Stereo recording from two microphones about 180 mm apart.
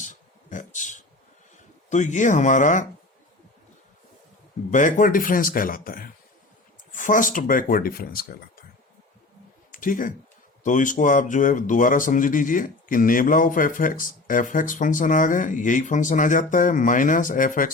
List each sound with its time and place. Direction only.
0.0 s a sound: 45° left (ahead or behind)
1.9 s speech: 40° left (ahead or behind)
4.7 s speech: 45° left (ahead or behind)
9.7 s speech: 45° left (ahead or behind)